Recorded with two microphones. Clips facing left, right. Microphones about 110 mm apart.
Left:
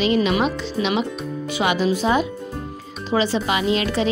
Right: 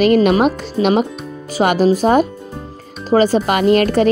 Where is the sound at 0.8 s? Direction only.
35° right (ahead or behind).